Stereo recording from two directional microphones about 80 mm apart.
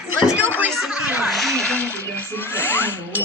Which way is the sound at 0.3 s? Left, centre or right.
Left.